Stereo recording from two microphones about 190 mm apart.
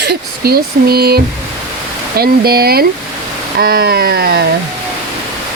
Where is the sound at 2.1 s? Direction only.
55° right (ahead or behind).